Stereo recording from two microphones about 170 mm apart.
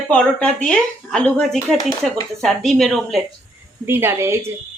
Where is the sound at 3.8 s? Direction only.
15° right (ahead or behind).